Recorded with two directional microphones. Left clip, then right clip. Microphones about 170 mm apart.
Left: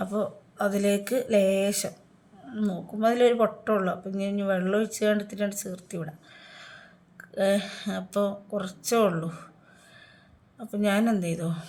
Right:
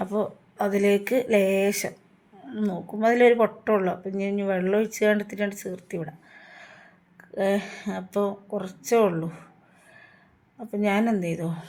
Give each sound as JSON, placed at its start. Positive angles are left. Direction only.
{"t": 0.0, "sound": "speech", "side_deg": -15}
{"t": 10.6, "sound": "speech", "side_deg": -15}